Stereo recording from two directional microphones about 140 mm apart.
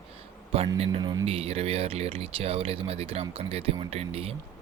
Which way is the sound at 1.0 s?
30° right (ahead or behind).